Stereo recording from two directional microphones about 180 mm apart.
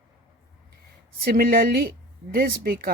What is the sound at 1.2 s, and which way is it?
A woman's voice, 55° right (ahead or behind).